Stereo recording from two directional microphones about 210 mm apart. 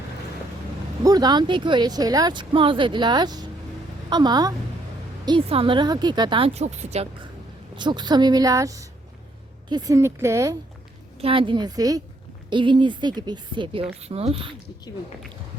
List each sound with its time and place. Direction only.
1.0 s speech: 20° right (ahead or behind)
7.8 s speech: 20° right (ahead or behind)
11.2 s speech: 25° right (ahead or behind)